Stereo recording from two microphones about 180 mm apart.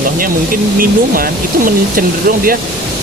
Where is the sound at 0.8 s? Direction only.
50° right (ahead or behind).